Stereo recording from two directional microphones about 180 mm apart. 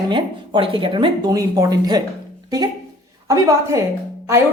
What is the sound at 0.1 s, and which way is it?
Speech, 25° right (ahead or behind).